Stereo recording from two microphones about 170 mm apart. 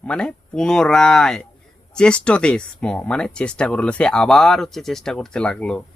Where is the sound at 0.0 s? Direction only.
5° left (ahead or behind).